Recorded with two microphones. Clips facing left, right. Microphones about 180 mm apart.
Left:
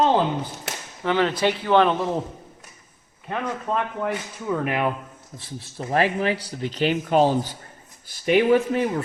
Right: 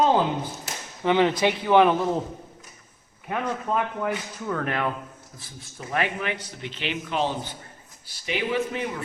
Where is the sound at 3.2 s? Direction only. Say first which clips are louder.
Even; 5° right (ahead or behind).